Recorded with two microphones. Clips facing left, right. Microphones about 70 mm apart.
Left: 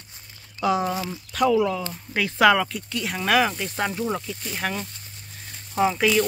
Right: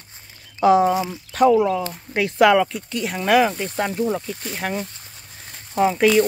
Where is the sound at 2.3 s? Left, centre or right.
Centre.